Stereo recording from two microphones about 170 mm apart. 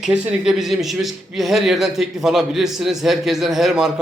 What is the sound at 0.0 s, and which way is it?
Speech, 5° right (ahead or behind).